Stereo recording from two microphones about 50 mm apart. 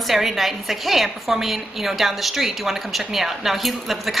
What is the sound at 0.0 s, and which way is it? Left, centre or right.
A woman's voice, centre.